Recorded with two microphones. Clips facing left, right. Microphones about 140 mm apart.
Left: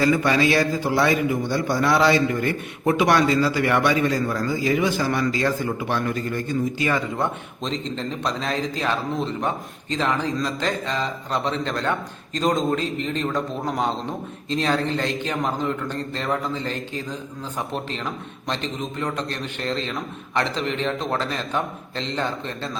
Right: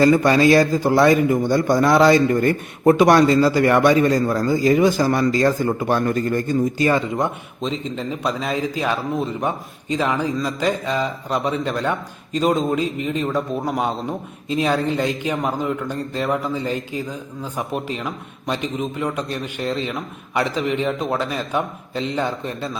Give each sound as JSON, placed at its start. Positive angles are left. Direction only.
{"t": 0.0, "sound": "a man's voice", "side_deg": -40}
{"t": 7.6, "sound": "a man's voice", "side_deg": -5}